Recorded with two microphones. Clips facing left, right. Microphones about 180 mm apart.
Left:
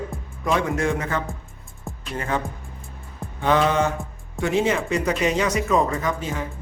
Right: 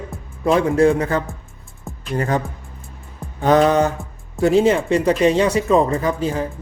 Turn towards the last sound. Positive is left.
turn(degrees=-35)  # may be behind; listen again after turning